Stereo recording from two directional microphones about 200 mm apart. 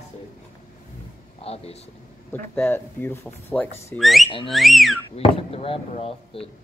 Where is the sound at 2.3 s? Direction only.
10° left (ahead or behind).